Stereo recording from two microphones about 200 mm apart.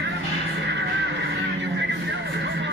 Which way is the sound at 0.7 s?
60° right (ahead or behind).